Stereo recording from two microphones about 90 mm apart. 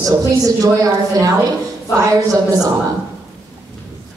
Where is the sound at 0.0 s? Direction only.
40° right (ahead or behind).